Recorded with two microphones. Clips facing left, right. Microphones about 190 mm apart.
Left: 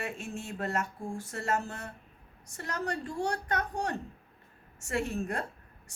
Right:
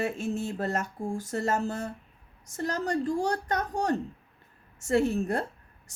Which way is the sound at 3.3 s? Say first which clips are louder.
Right 3 dB; 35° right (ahead or behind).